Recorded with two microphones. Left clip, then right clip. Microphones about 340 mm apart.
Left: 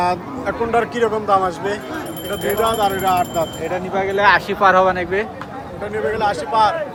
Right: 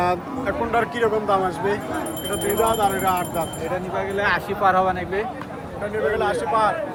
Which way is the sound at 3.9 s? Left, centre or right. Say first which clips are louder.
Left 9 dB; centre.